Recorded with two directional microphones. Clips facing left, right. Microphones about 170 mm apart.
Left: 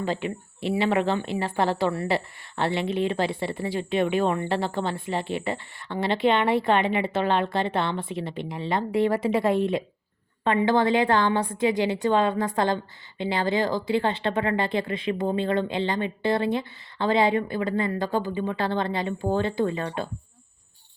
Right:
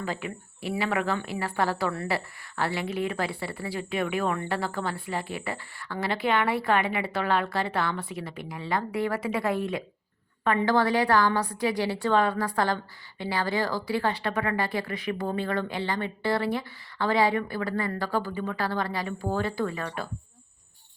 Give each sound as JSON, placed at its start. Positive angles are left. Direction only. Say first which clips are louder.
{"t": 0.0, "sound": "speech", "louder": "left 5 dB", "side_deg": 25}